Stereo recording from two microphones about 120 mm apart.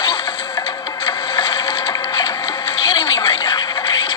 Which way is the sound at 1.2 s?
40° left (ahead or behind).